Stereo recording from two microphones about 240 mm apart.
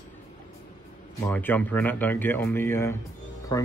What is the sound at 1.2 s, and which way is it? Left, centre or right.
Speech, centre.